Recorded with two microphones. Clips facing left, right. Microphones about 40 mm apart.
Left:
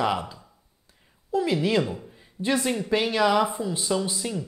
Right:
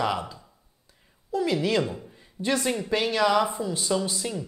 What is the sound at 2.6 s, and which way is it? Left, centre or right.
Speech, centre.